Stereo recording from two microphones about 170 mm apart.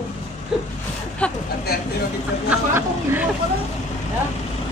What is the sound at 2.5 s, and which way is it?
Speech, 10° right (ahead or behind).